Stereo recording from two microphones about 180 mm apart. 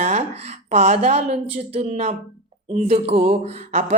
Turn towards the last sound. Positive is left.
turn(degrees=-35)  # may be behind; listen again after turning